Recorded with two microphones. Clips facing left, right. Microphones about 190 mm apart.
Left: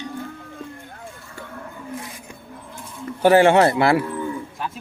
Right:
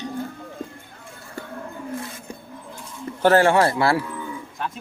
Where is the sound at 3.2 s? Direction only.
15° left (ahead or behind).